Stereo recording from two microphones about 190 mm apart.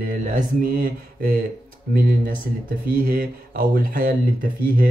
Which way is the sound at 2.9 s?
50° right (ahead or behind).